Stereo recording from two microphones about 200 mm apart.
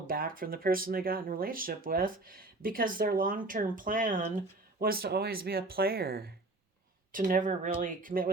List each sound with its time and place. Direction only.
0.1 s speech: 45° right (ahead or behind)